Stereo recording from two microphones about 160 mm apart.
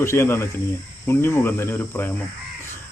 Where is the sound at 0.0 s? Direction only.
15° left (ahead or behind).